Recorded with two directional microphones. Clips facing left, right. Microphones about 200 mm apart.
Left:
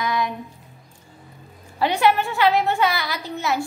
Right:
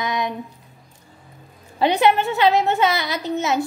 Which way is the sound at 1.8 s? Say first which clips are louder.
Right 2 dB; 20° right (ahead or behind).